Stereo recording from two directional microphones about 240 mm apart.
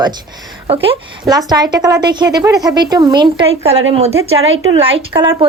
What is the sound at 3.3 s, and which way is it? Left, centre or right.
Speech, right.